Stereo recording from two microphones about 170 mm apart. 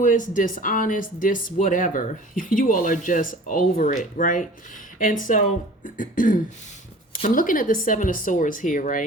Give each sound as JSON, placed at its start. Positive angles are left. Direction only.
{"t": 0.0, "sound": "speech", "side_deg": 50}